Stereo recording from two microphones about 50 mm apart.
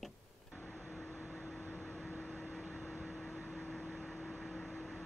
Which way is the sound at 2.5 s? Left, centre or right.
Centre.